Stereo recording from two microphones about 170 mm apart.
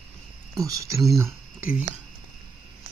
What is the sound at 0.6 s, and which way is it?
Speech, 20° right (ahead or behind).